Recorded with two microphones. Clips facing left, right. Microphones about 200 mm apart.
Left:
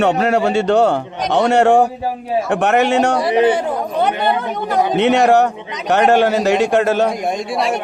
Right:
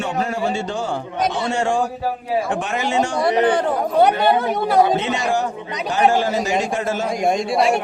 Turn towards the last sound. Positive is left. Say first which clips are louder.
# right 2 dB
turn(degrees=0)  # may be behind; listen again after turning